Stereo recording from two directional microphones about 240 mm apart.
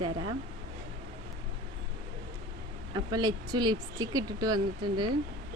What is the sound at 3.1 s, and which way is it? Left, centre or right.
Speech, centre.